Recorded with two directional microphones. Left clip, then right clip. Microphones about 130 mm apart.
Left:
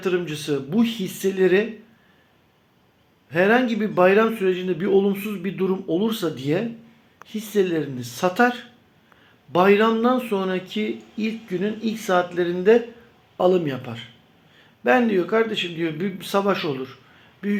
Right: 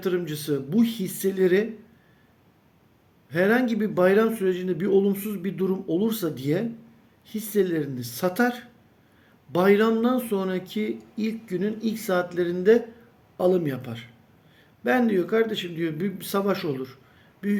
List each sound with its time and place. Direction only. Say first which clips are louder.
0.0 s speech: left 3 dB; 35° right (ahead or behind)
3.2 s speech: left 4 dB; 35° right (ahead or behind)